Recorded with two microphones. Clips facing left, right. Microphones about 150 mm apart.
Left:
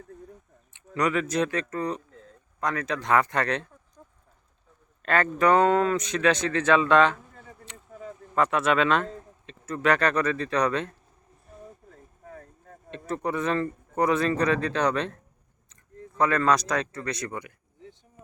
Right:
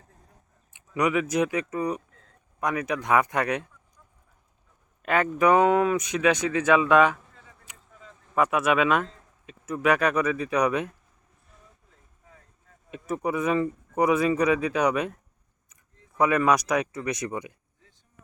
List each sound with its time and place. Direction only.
0.9 s speech: 15° right (ahead or behind)
5.0 s speech: 10° right (ahead or behind)
8.4 s speech: 10° right (ahead or behind)
11.6 s a sound: 50° left (ahead or behind)
13.1 s speech: 10° right (ahead or behind)